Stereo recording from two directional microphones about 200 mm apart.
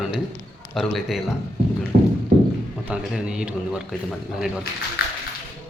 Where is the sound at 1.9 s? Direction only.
50° right (ahead or behind).